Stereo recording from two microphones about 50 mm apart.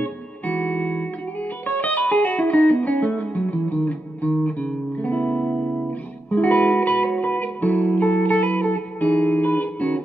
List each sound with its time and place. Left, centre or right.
0.0 s music: left